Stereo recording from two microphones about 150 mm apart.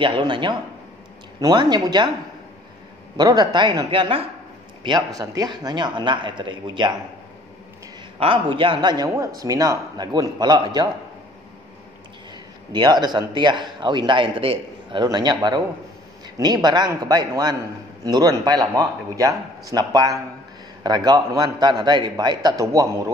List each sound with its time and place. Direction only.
0.0 s a man's voice: 35° right (ahead or behind)
3.2 s a man's voice: 25° right (ahead or behind)
8.2 s a man's voice: 35° right (ahead or behind)
12.7 s a man's voice: 30° right (ahead or behind)